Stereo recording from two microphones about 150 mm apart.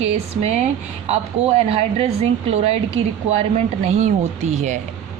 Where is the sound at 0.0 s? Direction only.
45° right (ahead or behind).